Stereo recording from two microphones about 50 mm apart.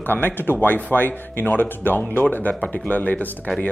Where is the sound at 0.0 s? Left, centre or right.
Left.